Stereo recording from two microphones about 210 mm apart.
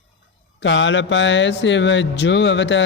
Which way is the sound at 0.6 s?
60° left (ahead or behind).